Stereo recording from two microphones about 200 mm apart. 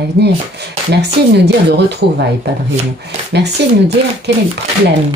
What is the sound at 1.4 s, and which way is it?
Speech, 55° right (ahead or behind).